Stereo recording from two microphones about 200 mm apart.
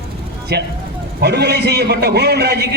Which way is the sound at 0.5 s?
55° right (ahead or behind).